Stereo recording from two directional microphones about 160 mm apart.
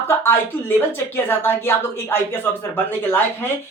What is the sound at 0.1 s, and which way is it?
Speech, 15° left (ahead or behind).